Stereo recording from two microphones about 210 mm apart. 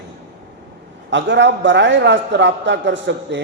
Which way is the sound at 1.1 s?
60° right (ahead or behind).